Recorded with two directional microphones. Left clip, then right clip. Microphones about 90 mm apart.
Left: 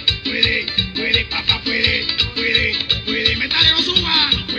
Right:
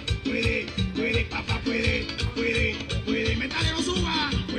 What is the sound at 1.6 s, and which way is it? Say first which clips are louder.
Salsa music: left 9 dB; 90° right.